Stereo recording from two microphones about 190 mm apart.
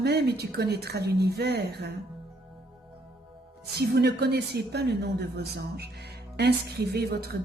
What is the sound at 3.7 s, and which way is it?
Speech, 60° right (ahead or behind).